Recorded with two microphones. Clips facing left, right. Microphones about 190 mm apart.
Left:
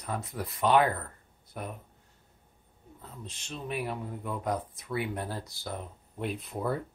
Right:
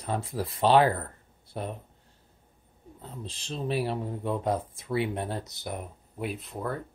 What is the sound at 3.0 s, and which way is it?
Speech, 30° right (ahead or behind).